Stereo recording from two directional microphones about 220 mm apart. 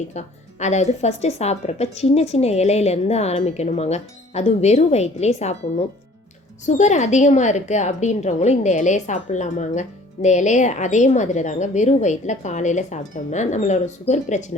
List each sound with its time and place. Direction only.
0.1 s a woman's voice: 30° left (ahead or behind)
6.7 s a woman's voice: 30° left (ahead or behind)